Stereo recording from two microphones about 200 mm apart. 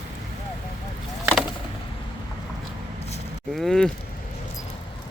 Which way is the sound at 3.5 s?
Centre (ahead or behind).